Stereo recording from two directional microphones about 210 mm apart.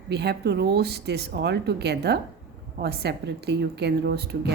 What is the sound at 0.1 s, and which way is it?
A woman's voice, 50° right (ahead or behind).